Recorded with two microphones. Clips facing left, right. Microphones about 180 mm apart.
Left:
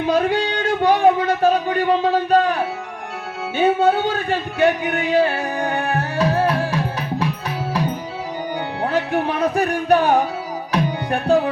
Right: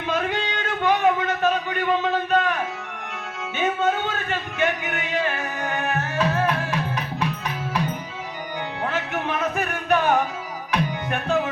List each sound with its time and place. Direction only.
0.1 s a sound: 35° left (ahead or behind)
3.6 s speech: 35° left (ahead or behind)
8.8 s speech: 35° left (ahead or behind)
11.3 s music: 35° left (ahead or behind)